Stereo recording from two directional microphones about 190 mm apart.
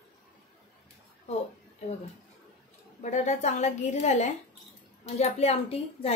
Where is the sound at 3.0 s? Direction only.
40° left (ahead or behind).